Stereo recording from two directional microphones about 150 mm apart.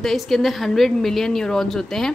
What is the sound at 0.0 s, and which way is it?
A woman's voice, centre (ahead or behind).